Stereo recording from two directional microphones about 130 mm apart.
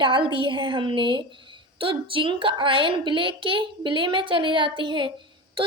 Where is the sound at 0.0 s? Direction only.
35° right (ahead or behind).